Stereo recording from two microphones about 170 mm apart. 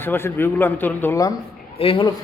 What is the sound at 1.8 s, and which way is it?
Speech, 30° left (ahead or behind).